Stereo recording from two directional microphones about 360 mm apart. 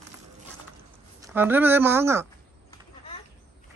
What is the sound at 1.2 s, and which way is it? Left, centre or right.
Speech, centre.